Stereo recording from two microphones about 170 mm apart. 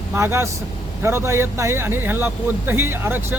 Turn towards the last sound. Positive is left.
turn(degrees=-15)  # may be behind; listen again after turning